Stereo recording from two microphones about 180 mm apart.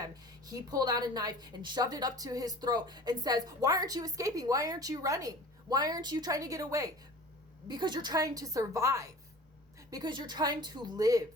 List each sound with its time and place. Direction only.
0.0 s a woman's voice: 20° right (ahead or behind)